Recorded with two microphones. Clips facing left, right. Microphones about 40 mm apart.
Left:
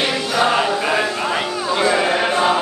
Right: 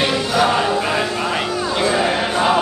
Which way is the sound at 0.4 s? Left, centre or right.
Centre.